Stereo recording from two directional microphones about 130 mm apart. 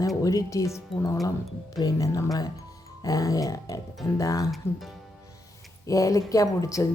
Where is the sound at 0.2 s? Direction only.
25° left (ahead or behind).